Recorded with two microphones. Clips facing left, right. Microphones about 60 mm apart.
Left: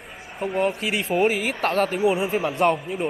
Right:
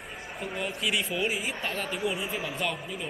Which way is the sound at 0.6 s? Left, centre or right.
Left.